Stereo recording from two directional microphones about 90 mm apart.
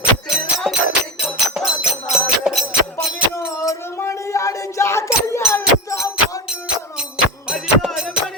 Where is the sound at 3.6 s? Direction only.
35° left (ahead or behind).